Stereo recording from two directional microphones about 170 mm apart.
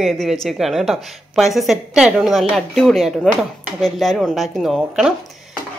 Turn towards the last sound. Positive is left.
turn(degrees=0)  # may be behind; listen again after turning